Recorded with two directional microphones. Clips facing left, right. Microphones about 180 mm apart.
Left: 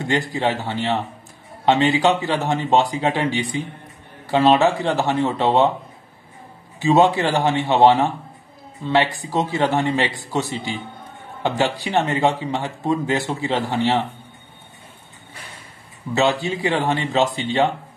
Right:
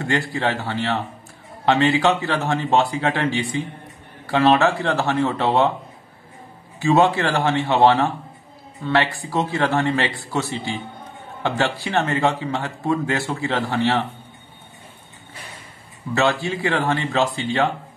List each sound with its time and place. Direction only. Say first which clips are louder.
0.0 s speech: left 1 dB; 20° left (ahead or behind)
6.8 s speech: left 1 dB; 20° left (ahead or behind)
16.2 s a man's voice: left 1 dB; 20° left (ahead or behind)